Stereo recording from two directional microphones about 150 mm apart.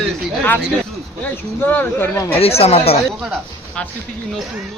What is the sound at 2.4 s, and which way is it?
Speech, 40° left (ahead or behind).